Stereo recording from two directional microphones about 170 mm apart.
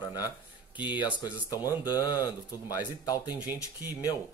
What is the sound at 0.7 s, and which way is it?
Speech, 10° right (ahead or behind).